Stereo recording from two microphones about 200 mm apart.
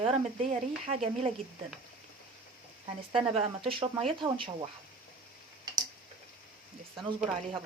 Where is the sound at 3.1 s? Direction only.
30° right (ahead or behind).